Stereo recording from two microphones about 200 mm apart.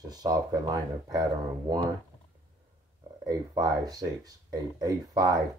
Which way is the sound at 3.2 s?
20° right (ahead or behind).